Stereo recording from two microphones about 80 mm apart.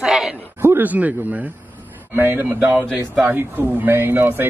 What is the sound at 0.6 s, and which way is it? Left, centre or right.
Speech, right.